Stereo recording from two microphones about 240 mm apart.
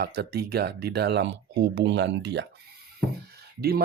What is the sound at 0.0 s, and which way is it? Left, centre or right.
Speech, right.